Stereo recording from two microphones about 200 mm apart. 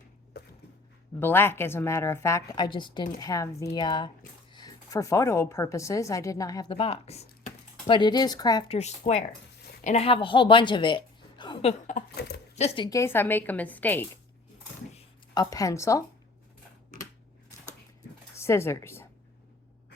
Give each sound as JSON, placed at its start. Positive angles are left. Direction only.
{"t": 1.2, "sound": "a woman's voice", "side_deg": 10}
{"t": 15.4, "sound": "a woman's voice", "side_deg": 15}
{"t": 18.3, "sound": "speech", "side_deg": 15}